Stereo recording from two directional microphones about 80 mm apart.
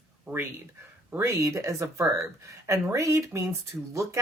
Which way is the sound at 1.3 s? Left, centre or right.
Right.